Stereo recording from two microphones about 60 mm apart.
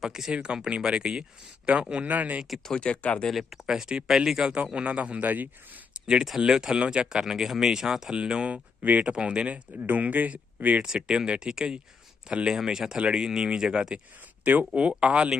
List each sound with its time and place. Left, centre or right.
0.0 s speech: centre; by 2.4 s right
2.6 s speech: centre
3.2 s speech: centre
3.7 s speech: centre; by 5.8 s right
6.4 s speech: centre
9.7 s speech: right
10.8 s speech: centre